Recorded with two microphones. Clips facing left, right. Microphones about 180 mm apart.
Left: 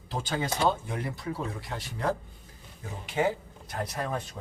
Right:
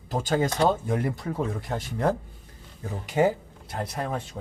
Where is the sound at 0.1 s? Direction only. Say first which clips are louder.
Right 6 dB; 45° right (ahead or behind).